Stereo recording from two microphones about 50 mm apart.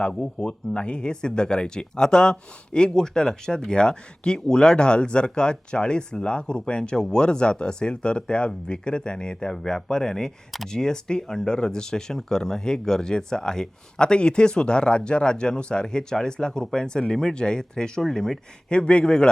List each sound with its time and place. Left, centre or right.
0.1 s speech: centre
18.7 s speech: left